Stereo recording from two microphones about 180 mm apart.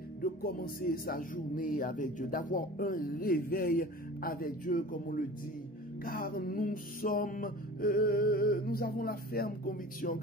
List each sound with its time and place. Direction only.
0.2 s speech: 55° left (ahead or behind)